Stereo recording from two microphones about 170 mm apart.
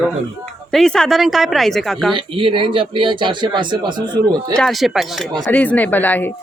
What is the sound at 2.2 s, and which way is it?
Speech, 30° right (ahead or behind).